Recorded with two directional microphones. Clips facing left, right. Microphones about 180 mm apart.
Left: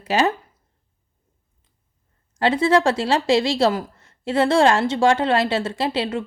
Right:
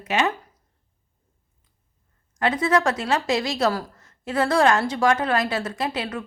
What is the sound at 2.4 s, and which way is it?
Speech, 30° left (ahead or behind).